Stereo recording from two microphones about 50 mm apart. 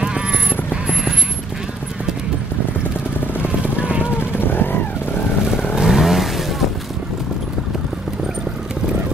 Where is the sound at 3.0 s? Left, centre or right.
Left.